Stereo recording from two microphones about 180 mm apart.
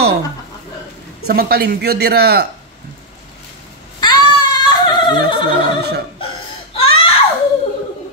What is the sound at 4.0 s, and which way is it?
Singing, 25° left (ahead or behind).